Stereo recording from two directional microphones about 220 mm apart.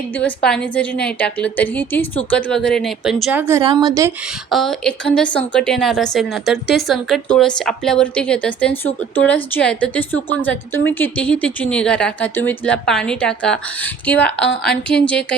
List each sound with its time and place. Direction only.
0.2 s a woman's voice: 5° left (ahead or behind); by 4.1 s 15° right (ahead or behind)
4.5 s a woman's voice: centre (ahead or behind)